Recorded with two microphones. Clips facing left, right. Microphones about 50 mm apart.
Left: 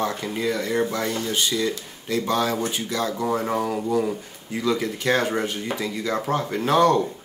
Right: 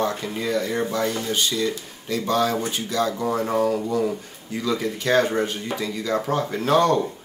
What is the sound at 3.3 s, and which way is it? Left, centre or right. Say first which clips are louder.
Speech: right 2 dB; centre.